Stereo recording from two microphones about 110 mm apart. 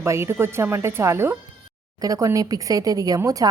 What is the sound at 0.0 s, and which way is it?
A woman's voice, 25° right (ahead or behind).